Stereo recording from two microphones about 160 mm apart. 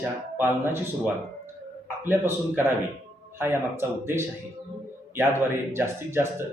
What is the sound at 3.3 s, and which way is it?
Speech, 15° right (ahead or behind).